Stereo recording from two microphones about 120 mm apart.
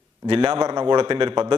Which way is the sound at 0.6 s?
40° right (ahead or behind).